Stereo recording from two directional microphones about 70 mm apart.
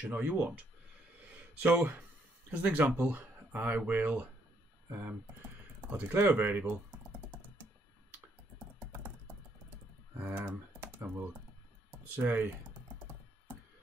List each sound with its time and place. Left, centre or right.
0.0 s speech: right
2.5 s speech: centre
2.8 s speech: right
10.1 s speech: right